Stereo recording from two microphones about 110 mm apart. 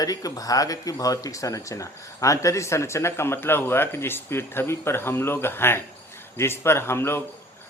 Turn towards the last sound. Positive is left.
turn(degrees=20)  # may be behind; listen again after turning